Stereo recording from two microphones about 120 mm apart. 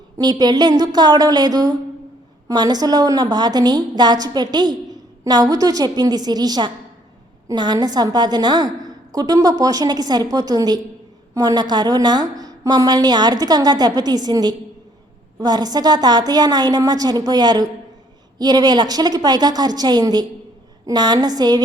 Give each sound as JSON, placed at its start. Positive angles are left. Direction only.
{"t": 0.2, "sound": "a woman's voice", "side_deg": -35}